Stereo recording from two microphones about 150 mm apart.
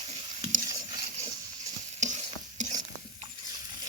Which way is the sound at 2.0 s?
55° right (ahead or behind).